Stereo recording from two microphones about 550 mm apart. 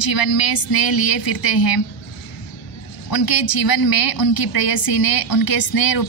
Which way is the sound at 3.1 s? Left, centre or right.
Left.